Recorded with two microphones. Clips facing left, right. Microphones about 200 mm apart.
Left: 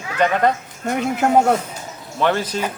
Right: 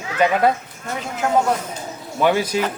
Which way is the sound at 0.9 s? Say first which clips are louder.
Left 4 dB; 60° left (ahead or behind).